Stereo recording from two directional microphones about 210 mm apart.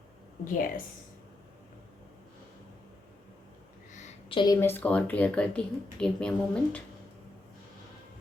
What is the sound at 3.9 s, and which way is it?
Speech, 25° left (ahead or behind).